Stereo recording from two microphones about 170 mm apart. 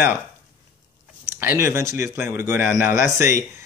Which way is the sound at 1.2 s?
15° right (ahead or behind).